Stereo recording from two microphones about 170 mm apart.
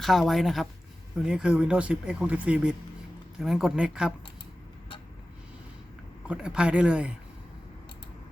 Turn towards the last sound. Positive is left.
turn(degrees=-5)  # may be behind; listen again after turning